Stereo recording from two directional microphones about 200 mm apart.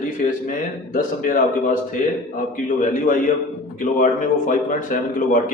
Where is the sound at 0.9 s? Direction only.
40° left (ahead or behind).